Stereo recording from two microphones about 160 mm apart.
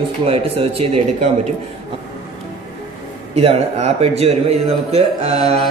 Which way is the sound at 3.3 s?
40° right (ahead or behind).